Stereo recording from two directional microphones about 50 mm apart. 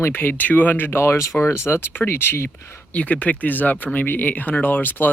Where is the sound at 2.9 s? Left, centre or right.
Left.